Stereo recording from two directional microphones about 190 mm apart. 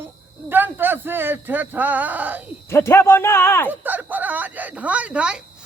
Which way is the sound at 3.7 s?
10° right (ahead or behind).